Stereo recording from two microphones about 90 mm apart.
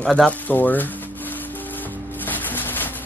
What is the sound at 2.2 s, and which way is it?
Music, 20° left (ahead or behind).